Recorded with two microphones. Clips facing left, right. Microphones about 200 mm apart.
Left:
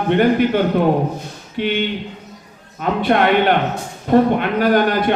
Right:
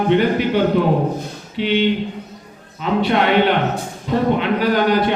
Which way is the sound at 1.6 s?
50° left (ahead or behind).